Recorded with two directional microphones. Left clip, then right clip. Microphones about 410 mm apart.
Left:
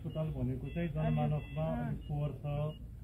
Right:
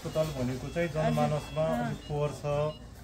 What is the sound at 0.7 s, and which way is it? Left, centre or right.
Speech, right.